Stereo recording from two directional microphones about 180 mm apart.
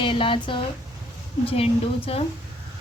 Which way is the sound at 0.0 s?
30° left (ahead or behind).